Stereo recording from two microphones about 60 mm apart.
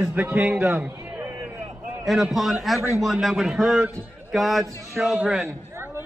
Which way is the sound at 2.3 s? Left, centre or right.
Centre.